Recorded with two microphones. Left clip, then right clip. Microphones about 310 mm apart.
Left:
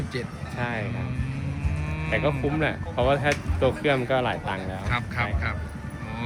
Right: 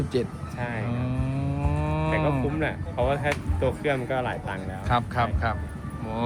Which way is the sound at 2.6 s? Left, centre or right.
Left.